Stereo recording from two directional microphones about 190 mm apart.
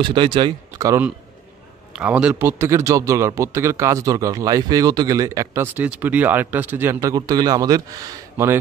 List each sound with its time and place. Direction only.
0.0 s speech: 25° right (ahead or behind)
2.0 s a man's voice: 5° right (ahead or behind)